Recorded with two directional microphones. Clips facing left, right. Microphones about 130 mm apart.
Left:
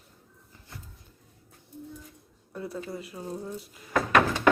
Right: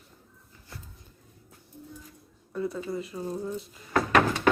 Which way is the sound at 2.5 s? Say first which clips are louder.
Right 4 dB; 5° left (ahead or behind).